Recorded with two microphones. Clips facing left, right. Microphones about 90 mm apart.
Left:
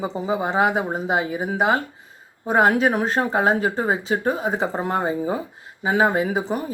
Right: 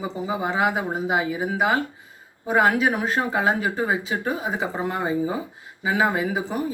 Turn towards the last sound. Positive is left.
turn(degrees=35)  # may be behind; listen again after turning